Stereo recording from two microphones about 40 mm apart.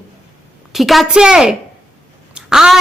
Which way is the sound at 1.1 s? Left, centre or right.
Centre.